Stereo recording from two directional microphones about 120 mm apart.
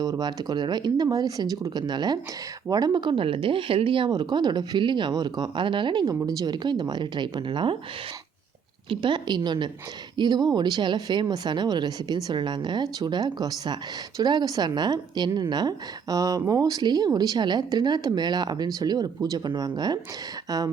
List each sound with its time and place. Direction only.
0.0 s a woman's voice: 35° right (ahead or behind)
8.9 s a woman's voice: 40° right (ahead or behind)